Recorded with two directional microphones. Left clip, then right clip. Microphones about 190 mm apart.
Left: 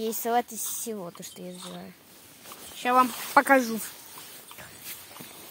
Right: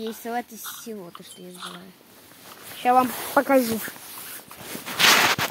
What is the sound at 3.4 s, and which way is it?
Speech, 20° left (ahead or behind).